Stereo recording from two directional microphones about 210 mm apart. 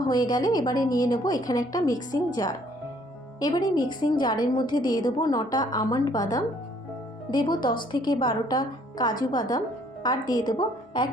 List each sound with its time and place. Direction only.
0.1 s a woman's voice: 20° left (ahead or behind)